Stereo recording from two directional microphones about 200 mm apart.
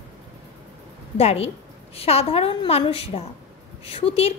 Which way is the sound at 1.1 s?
30° left (ahead or behind).